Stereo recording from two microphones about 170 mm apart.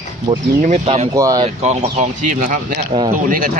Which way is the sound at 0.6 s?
40° right (ahead or behind).